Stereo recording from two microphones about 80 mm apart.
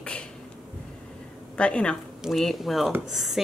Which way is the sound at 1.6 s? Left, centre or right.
Centre.